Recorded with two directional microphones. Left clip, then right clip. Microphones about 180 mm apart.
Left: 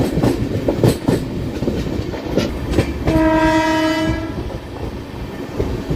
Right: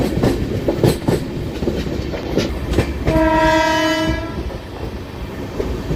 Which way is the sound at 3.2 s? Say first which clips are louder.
Right 1 dB; 25° left (ahead or behind).